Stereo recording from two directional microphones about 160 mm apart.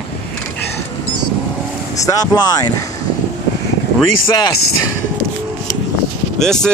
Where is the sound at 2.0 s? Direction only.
25° left (ahead or behind).